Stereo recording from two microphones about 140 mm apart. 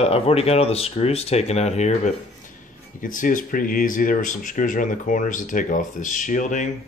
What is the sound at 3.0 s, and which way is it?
Speech, 75° left (ahead or behind).